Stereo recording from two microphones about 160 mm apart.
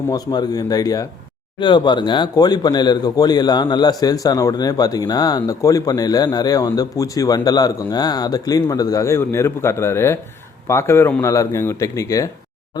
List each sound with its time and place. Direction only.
0.1 s speech: 25° left (ahead or behind)